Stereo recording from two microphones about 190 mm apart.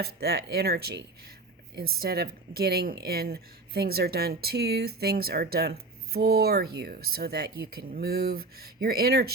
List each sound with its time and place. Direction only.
0.0 s speech: 55° right (ahead or behind)